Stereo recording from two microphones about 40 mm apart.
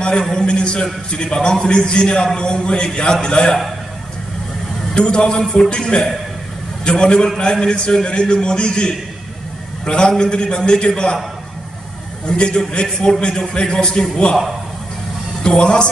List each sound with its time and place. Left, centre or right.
0.0 s a sound: left
0.3 s a man's voice: left
4.9 s a man's voice: left
12.3 s a man's voice: left
15.4 s a man's voice: left